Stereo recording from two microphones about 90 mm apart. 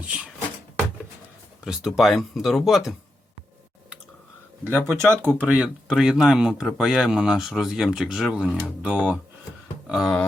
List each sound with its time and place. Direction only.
1.6 s speech: 5° right (ahead or behind)
4.6 s speech: 25° right (ahead or behind)
9.8 s speech: 5° right (ahead or behind)